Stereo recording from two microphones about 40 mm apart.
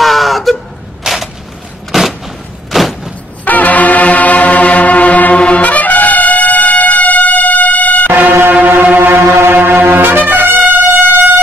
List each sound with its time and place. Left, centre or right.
0.0 s a sound: centre
3.4 s music: left
8.1 s music: right